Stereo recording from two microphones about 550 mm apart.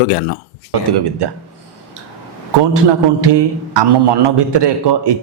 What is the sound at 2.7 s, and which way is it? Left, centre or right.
A man's voice, right.